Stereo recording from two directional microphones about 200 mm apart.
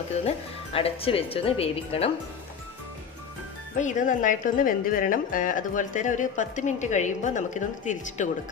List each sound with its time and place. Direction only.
0.7 s speech: 30° left (ahead or behind)
3.7 s a woman's voice: 40° left (ahead or behind)